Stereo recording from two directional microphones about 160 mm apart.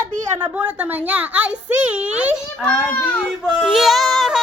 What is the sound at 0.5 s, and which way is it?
A child's voice, 10° right (ahead or behind).